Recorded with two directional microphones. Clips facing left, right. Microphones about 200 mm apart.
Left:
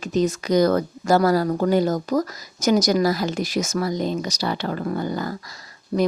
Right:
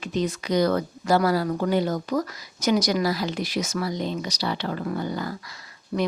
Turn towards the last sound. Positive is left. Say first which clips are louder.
# left 5 dB
turn(degrees=35)  # may be behind; listen again after turning